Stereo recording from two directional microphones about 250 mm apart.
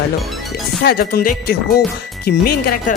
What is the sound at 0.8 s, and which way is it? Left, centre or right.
Music, left.